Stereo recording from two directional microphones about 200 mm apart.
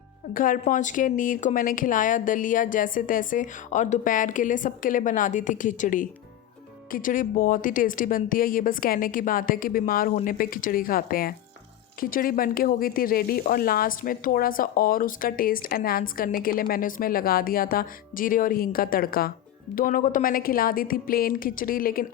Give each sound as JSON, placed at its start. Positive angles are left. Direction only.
{"t": 0.3, "sound": "speech", "side_deg": 45}